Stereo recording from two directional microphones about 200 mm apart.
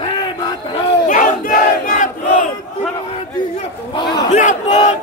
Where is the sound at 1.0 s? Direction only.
40° left (ahead or behind).